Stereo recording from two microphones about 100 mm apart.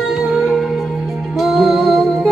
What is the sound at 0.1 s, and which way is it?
Music, 5° right (ahead or behind).